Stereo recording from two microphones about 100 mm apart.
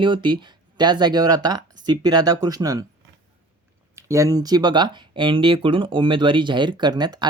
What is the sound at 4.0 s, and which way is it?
Speech, 30° right (ahead or behind).